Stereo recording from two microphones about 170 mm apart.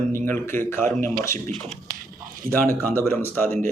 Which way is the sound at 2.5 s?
10° left (ahead or behind).